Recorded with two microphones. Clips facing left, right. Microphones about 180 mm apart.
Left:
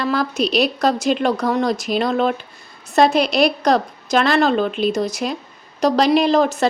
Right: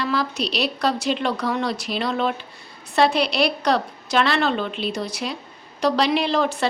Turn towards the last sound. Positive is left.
turn(degrees=45)  # may be behind; listen again after turning